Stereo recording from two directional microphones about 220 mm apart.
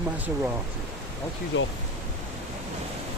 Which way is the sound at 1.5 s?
55° left (ahead or behind).